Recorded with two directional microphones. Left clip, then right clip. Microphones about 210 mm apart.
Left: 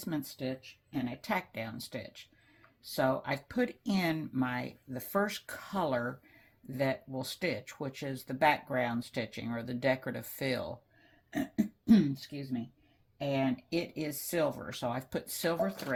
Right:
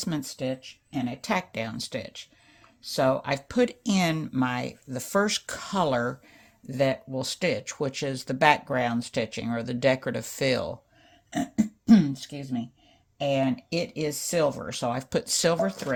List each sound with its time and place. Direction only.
0.0 s speech: 45° right (ahead or behind)